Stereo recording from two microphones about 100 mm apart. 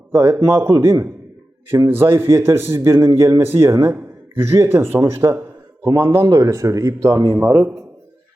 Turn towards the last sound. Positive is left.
turn(degrees=-25)  # may be behind; listen again after turning